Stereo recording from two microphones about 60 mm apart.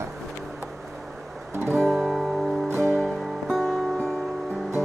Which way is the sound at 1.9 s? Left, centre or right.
Centre.